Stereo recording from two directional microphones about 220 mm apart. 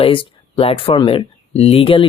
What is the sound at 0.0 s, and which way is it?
Speech, 25° left (ahead or behind).